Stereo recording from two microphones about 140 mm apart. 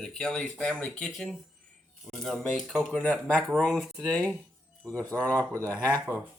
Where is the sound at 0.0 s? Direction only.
5° left (ahead or behind).